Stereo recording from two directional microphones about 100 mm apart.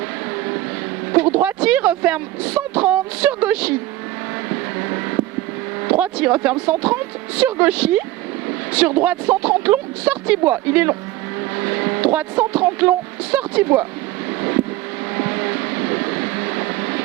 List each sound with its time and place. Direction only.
1.2 s speech: 15° right (ahead or behind)
4.8 s vehicle: 20° right (ahead or behind)
5.8 s speech: 15° right (ahead or behind)
11.5 s vehicle: 20° right (ahead or behind)
12.0 s speech: 10° right (ahead or behind)
15.1 s vehicle: 20° right (ahead or behind)